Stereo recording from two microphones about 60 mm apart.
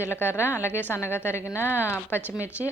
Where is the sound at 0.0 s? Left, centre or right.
Left.